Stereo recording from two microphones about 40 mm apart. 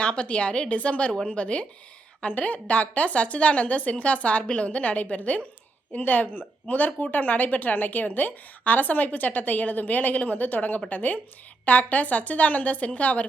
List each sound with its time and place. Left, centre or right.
0.0 s a woman's voice: left